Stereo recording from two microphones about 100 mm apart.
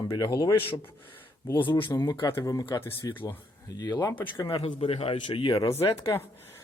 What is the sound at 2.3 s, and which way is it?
Speech, 35° left (ahead or behind).